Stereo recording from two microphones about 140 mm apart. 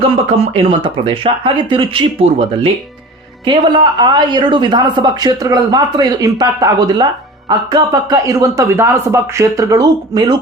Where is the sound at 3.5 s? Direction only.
30° right (ahead or behind).